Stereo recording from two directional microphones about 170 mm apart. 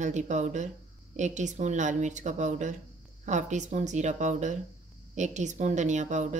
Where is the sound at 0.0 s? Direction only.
45° right (ahead or behind).